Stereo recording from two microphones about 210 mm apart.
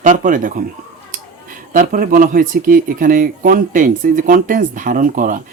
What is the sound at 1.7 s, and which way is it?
Speech, 40° right (ahead or behind).